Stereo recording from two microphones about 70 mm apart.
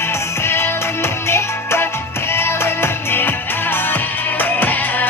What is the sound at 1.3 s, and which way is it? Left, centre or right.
Music, left.